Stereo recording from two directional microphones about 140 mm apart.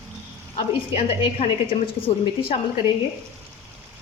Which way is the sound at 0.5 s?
45° left (ahead or behind).